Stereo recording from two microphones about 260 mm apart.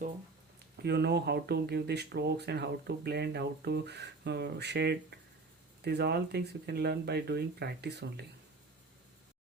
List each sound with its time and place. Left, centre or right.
0.8 s speech: right